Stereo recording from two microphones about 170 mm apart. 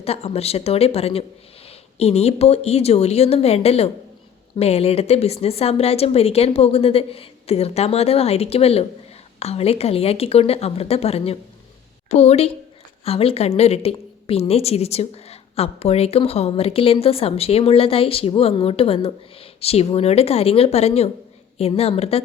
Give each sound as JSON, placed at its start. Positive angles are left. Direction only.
{"t": 0.0, "sound": "a woman's voice", "side_deg": 35}